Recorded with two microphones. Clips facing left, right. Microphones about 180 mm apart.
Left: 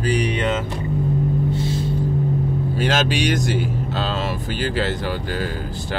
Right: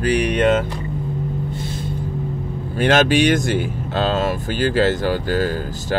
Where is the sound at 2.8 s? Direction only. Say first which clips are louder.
Right 7 dB; 55° right (ahead or behind).